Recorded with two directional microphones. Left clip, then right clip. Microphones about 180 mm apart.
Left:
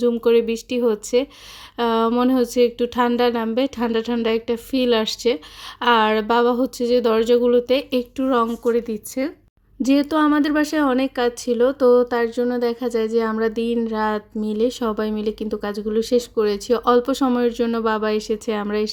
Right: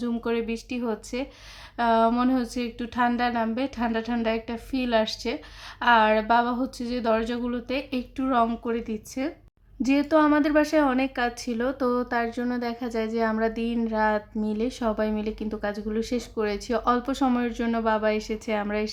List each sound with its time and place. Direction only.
0.0 s speech: 30° left (ahead or behind)